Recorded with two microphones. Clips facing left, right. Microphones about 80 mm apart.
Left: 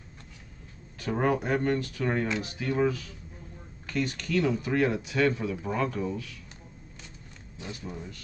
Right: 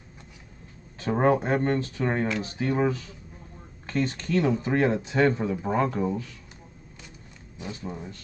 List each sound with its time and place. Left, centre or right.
0.9 s speech: right
7.5 s speech: right